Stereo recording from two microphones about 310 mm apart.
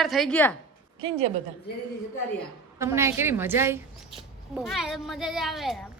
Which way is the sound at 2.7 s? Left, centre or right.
Centre.